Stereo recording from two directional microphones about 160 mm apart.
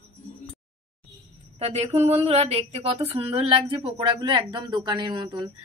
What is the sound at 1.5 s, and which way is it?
Speech, 40° right (ahead or behind).